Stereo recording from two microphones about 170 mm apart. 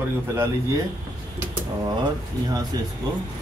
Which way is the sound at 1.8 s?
20° right (ahead or behind).